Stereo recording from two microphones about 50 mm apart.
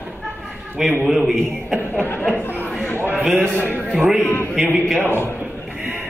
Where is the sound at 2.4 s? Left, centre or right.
Left.